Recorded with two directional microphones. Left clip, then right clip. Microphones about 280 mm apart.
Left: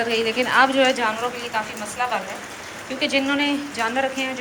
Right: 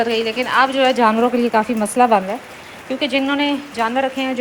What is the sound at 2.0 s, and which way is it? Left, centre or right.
Speech, centre.